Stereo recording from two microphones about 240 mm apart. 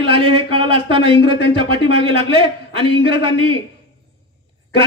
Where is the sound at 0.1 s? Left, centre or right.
Right.